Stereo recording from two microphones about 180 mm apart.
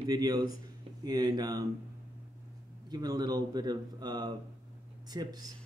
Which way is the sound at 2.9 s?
20° right (ahead or behind).